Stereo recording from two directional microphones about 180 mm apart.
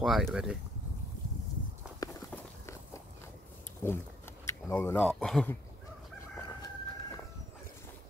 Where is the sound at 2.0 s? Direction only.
15° left (ahead or behind).